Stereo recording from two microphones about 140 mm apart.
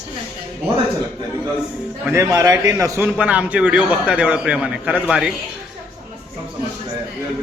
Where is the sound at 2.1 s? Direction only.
20° right (ahead or behind); by 5.3 s 5° right (ahead or behind).